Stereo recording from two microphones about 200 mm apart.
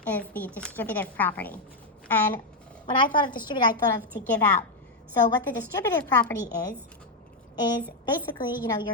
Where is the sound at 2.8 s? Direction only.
25° left (ahead or behind).